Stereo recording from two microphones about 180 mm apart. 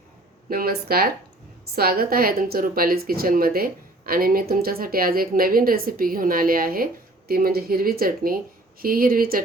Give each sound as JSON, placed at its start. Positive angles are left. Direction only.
{"t": 0.5, "sound": "speech", "side_deg": -55}